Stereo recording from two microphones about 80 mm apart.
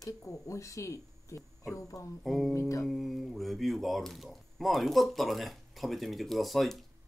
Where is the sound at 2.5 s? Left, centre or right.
Left.